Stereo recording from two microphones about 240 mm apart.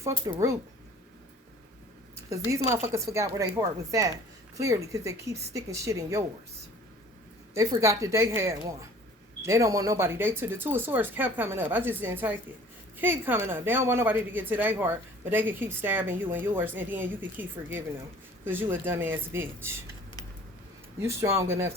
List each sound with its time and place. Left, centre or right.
0.3 s a woman's voice: centre
2.3 s a woman's voice: centre
7.5 s a woman's voice: centre
21.0 s a woman's voice: centre